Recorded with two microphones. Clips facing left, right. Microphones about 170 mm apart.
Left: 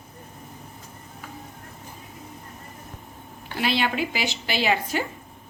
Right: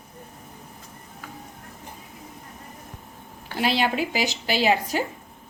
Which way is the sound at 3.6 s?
40° right (ahead or behind).